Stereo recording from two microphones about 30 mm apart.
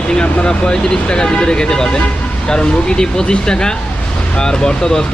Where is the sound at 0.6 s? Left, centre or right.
Left.